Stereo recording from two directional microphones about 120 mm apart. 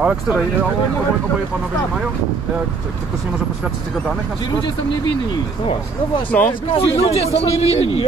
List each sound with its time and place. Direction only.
0.0 s speech: 10° right (ahead or behind)
6.3 s speech: 10° left (ahead or behind)
6.7 s a man's voice: 55° left (ahead or behind)